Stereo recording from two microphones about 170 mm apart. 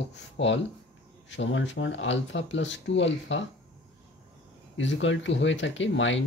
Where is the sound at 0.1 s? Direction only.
90° left.